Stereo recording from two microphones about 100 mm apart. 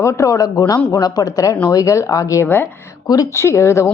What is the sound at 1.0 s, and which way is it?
A woman's voice, 40° left (ahead or behind).